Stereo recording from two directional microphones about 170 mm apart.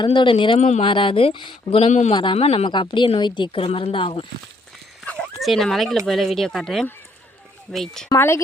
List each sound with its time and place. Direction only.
0.0 s a woman's voice: 30° left (ahead or behind)
5.4 s speech: centre (ahead or behind)
8.1 s speech: 15° left (ahead or behind)